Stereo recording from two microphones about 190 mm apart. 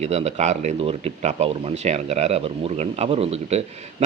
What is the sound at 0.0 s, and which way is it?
Speech, 35° right (ahead or behind).